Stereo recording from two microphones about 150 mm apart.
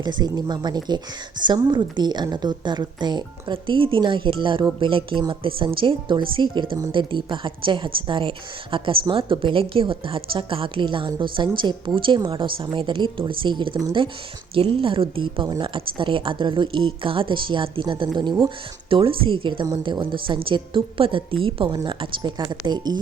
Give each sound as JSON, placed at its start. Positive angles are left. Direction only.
{"t": 0.0, "sound": "a woman's voice", "side_deg": -30}